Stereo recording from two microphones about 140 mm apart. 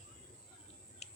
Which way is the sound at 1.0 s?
50° left (ahead or behind).